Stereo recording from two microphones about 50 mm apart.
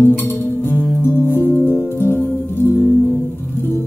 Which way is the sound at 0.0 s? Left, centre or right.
Left.